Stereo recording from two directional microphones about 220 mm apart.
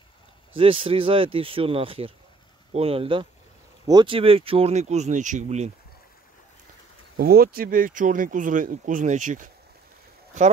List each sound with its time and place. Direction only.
0.6 s speech: 25° right (ahead or behind)
7.2 s speech: 45° right (ahead or behind)